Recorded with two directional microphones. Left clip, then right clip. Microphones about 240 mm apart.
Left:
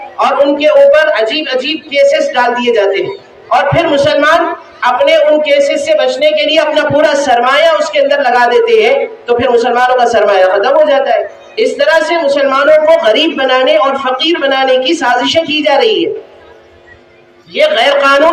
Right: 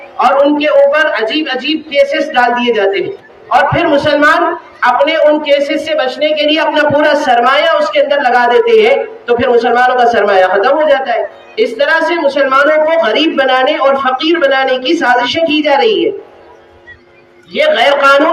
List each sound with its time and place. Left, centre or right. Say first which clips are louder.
0.2 s a woman's voice: even; right
17.5 s a woman's voice: left 1 dB; right